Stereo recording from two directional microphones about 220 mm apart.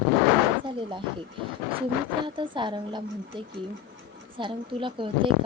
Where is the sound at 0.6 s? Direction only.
20° right (ahead or behind).